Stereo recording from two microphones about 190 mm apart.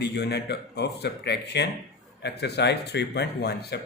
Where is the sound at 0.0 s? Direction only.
60° left (ahead or behind).